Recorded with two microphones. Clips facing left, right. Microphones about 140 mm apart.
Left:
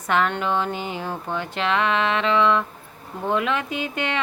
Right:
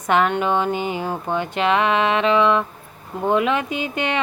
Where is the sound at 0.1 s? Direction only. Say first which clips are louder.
Right 4 dB; 15° right (ahead or behind).